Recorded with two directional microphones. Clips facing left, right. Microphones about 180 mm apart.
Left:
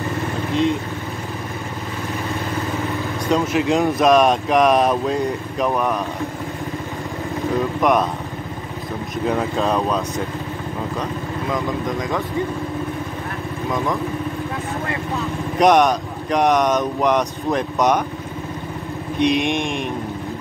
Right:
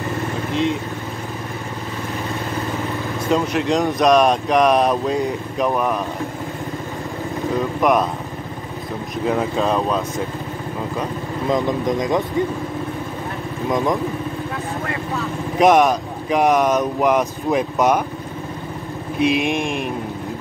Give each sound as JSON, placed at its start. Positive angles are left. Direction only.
{"t": 3.3, "sound": "speech", "side_deg": 0}
{"t": 7.5, "sound": "speech", "side_deg": 0}
{"t": 9.2, "sound": "speech", "side_deg": 0}
{"t": 11.5, "sound": "speech", "side_deg": -20}
{"t": 13.7, "sound": "speech", "side_deg": -20}
{"t": 15.5, "sound": "speech", "side_deg": 0}
{"t": 19.1, "sound": "speech", "side_deg": 0}